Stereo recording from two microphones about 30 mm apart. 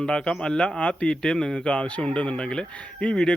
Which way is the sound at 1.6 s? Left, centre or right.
Left.